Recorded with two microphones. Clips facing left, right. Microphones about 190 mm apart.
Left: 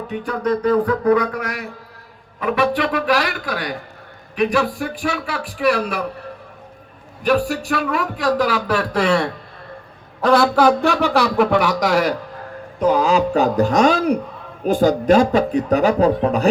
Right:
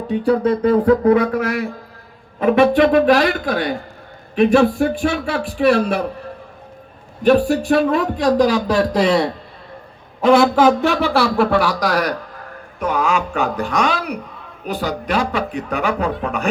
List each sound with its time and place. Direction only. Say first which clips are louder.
0.1 s speech: right 6 dB; 30° right (ahead or behind)
7.3 s speech: right 5 dB; 25° right (ahead or behind)
10.2 s speech: right 3 dB; 5° right (ahead or behind)
10.8 s speech: even; 15° left (ahead or behind); by 16.5 s 35° left (ahead or behind)